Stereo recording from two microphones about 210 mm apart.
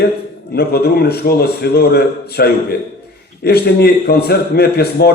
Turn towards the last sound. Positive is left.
turn(degrees=50)  # may be behind; listen again after turning